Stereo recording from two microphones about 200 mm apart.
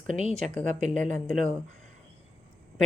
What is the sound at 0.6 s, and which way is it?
Speech, 40° right (ahead or behind).